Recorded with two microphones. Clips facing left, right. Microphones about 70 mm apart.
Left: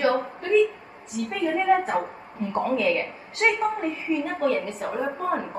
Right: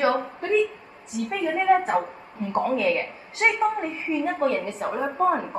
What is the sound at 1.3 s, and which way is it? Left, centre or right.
Speech, centre.